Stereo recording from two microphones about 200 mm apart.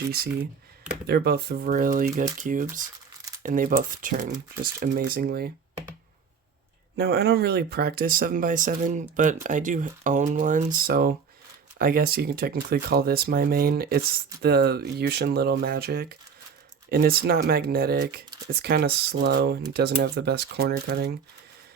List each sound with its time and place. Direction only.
1.0 s speech: 55° right (ahead or behind)
6.9 s speech: 55° right (ahead or behind)